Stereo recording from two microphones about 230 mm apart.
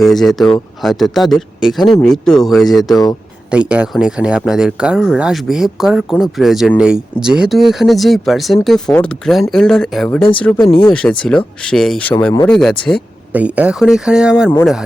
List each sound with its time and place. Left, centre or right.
0.0 s speech: centre
2.9 s a man's voice: centre
3.5 s a man's voice: centre
12.5 s speech: centre